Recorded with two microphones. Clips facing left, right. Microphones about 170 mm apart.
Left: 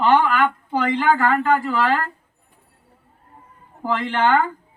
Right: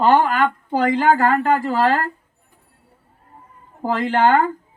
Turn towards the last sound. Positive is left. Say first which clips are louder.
# right 3 dB
turn(degrees=-40)  # may be behind; listen again after turning